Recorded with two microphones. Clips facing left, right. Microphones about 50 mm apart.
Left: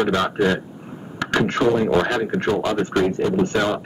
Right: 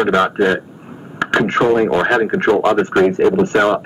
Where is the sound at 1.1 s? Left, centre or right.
Right.